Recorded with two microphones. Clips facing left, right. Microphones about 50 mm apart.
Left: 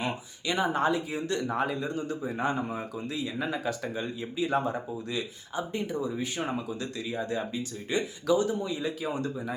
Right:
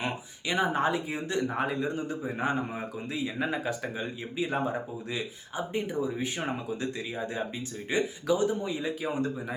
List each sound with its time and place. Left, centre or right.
0.0 s speech: centre